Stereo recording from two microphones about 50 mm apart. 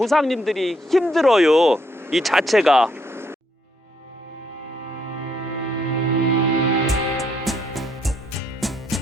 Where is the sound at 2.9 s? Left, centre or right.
Right.